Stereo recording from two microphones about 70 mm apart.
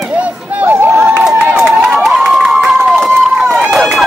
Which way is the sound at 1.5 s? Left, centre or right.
Centre.